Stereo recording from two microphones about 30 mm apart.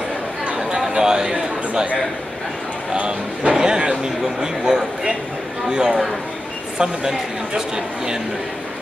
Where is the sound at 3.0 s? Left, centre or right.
Right.